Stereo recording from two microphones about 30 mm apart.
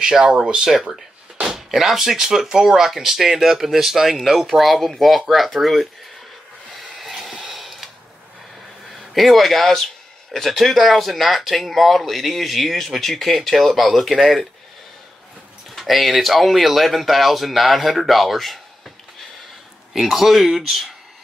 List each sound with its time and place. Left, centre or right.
0.0 s speech: right
1.7 s speech: centre
7.0 s a sound: centre
8.9 s speech: centre
15.7 s speech: centre
19.9 s speech: centre